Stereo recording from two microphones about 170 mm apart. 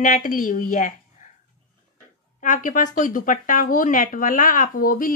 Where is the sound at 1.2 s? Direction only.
50° left (ahead or behind).